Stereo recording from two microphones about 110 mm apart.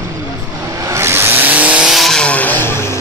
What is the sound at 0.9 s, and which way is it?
Vehicle, 25° right (ahead or behind).